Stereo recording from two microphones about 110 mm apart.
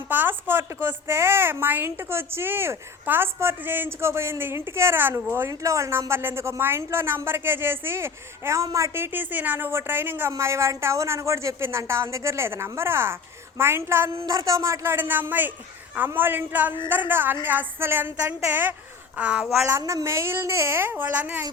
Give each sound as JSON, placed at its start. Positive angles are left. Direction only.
{"t": 0.1, "sound": "a woman's voice", "side_deg": -20}
{"t": 19.8, "sound": "speech", "side_deg": -30}